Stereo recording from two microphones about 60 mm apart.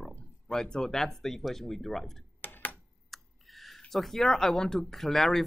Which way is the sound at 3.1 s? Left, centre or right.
Centre.